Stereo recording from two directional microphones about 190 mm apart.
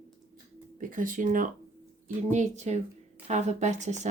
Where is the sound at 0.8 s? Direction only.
45° right (ahead or behind).